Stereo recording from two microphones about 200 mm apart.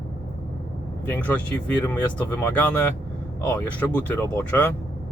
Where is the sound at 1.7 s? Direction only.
10° left (ahead or behind).